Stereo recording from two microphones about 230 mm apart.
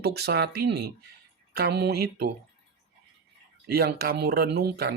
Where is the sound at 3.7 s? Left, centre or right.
Right.